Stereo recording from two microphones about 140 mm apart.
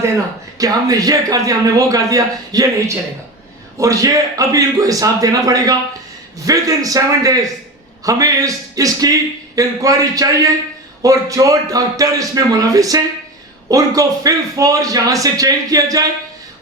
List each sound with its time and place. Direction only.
0.6 s a man's voice: 25° right (ahead or behind)